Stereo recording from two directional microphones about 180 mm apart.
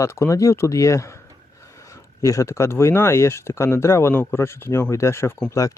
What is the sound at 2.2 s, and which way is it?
Speech, 15° left (ahead or behind).